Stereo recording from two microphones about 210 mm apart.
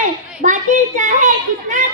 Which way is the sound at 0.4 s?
35° right (ahead or behind).